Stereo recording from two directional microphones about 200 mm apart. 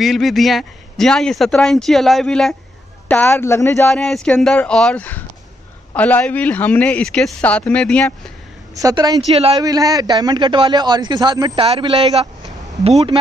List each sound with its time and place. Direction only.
0.0 s speech: centre (ahead or behind)
3.9 s speech: centre (ahead or behind)
8.7 s a man's voice: 20° right (ahead or behind)
9.2 s a man's voice: 30° right (ahead or behind)
9.7 s a man's voice: 20° right (ahead or behind)